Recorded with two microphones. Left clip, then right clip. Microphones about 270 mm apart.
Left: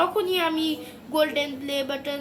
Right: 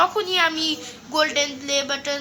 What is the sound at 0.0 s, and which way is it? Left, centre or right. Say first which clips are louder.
A woman's voice: right 4 dB; centre.